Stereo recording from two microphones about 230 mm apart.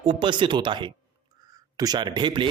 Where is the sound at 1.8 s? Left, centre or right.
Centre.